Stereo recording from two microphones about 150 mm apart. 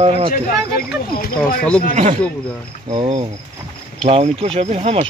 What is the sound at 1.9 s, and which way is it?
Speech, 45° right (ahead or behind).